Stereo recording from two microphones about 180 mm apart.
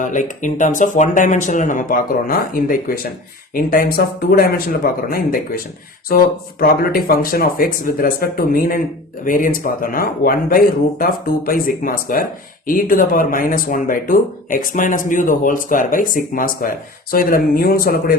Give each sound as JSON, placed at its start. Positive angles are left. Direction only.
{"t": 0.0, "sound": "speech", "side_deg": 45}
{"t": 6.6, "sound": "speech", "side_deg": 55}